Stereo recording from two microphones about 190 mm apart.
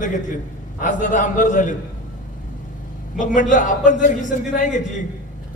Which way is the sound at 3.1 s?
40° left (ahead or behind).